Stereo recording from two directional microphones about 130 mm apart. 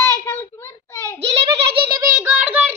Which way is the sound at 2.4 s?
10° right (ahead or behind).